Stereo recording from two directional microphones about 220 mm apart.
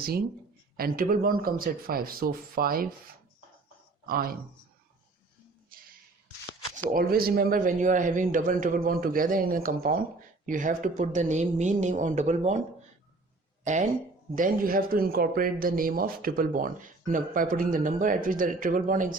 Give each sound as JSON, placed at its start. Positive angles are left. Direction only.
{"t": 0.8, "sound": "a man's voice", "side_deg": -40}
{"t": 4.0, "sound": "speech", "side_deg": -40}
{"t": 5.7, "sound": "a sound", "side_deg": -40}
{"t": 6.9, "sound": "a man's voice", "side_deg": -45}
{"t": 14.3, "sound": "a man's voice", "side_deg": -40}